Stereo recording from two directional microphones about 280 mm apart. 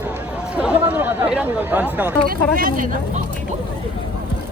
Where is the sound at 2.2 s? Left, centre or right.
Right.